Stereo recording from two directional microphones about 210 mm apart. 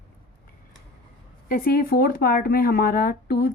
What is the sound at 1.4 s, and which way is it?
Speech, 45° left (ahead or behind).